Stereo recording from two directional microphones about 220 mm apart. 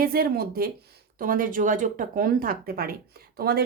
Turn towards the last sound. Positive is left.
turn(degrees=-45)  # may be behind; listen again after turning